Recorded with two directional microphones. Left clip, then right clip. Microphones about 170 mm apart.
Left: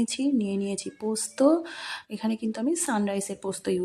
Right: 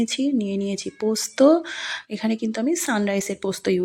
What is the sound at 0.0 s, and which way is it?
Speech, 15° right (ahead or behind).